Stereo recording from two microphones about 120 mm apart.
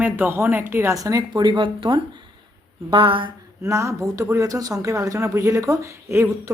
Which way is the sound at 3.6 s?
25° right (ahead or behind).